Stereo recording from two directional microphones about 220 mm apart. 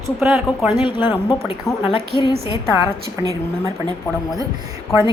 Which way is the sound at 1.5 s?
25° left (ahead or behind).